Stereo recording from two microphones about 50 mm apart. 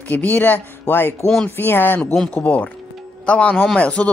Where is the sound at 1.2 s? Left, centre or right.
Centre.